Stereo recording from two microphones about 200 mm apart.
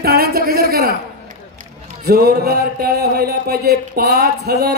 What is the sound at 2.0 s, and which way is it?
Speech, 50° right (ahead or behind).